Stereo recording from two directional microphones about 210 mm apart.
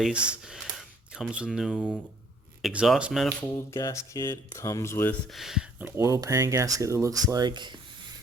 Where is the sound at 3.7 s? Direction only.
15° left (ahead or behind).